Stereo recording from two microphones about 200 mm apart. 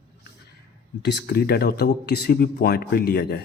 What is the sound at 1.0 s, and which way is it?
Speech, 55° left (ahead or behind).